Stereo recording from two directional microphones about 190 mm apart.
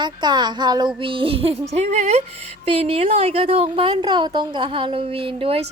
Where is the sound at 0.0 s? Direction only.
20° right (ahead or behind).